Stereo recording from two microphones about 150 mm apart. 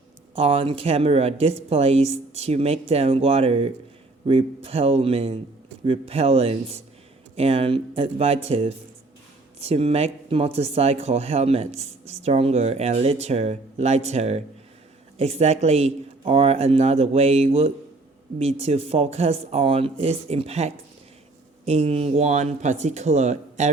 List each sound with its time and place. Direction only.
0.3 s speech: 40° right (ahead or behind)